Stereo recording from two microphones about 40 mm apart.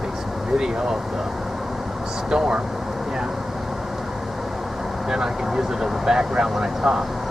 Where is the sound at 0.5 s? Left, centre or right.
Centre.